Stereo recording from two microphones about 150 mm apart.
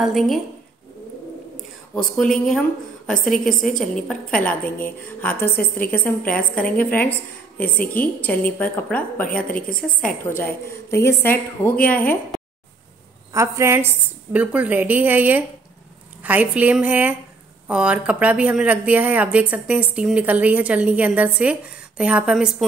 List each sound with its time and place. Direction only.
0.0 s a woman's voice: centre (ahead or behind)
2.3 s a woman's voice: 5° left (ahead or behind)
3.7 s a woman's voice: 5° left (ahead or behind)
9.7 s a woman's voice: 65° left (ahead or behind)
10.2 s a woman's voice: 15° left (ahead or behind)
13.3 s a woman's voice: 20° right (ahead or behind)